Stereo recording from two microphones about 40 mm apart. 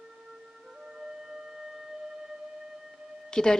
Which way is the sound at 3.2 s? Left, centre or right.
Centre.